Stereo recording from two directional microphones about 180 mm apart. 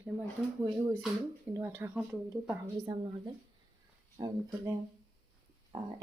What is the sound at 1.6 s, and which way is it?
Speech, 10° right (ahead or behind).